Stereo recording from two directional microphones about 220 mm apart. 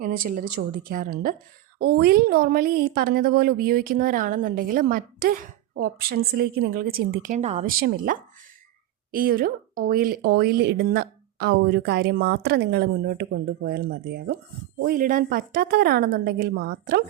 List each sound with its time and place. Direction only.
0.0 s a woman's voice: 40° right (ahead or behind)